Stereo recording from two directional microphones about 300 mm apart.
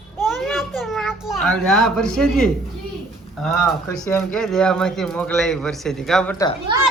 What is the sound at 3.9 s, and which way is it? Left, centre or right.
A child's voice, centre.